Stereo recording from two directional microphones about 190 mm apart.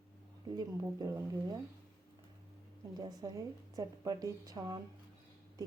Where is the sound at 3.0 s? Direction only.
20° right (ahead or behind).